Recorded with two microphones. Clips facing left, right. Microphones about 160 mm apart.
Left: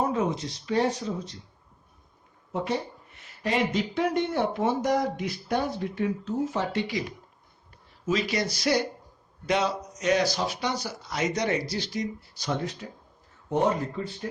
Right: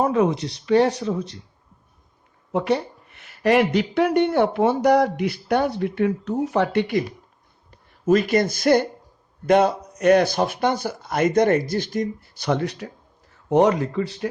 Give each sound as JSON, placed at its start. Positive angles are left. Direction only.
{"t": 0.0, "sound": "speech", "side_deg": -70}
{"t": 2.5, "sound": "speech", "side_deg": -70}
{"t": 8.0, "sound": "speech", "side_deg": -55}
{"t": 13.5, "sound": "speech", "side_deg": -80}